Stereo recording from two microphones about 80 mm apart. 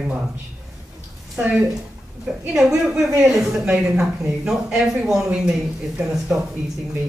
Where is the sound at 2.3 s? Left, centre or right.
Centre.